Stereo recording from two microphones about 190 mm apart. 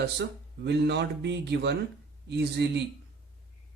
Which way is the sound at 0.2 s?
60° right (ahead or behind).